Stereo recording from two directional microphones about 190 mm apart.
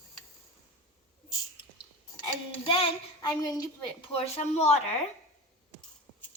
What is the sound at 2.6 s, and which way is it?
Child singing, 30° left (ahead or behind).